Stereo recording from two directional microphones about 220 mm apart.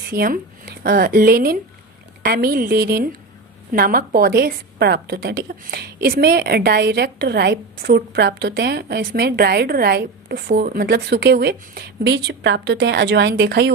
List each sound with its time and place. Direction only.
0.1 s a woman's voice: 40° right (ahead or behind)